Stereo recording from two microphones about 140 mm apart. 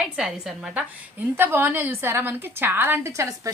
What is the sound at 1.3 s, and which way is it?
A woman's voice, 15° right (ahead or behind).